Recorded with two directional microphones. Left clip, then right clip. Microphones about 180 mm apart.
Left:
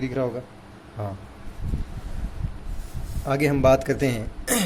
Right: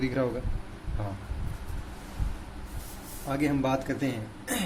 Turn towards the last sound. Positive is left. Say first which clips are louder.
# left 7 dB
turn(degrees=50)  # may be behind; listen again after turning